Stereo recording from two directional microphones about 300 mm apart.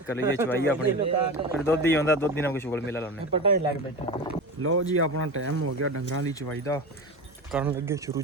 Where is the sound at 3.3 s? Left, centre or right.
Centre.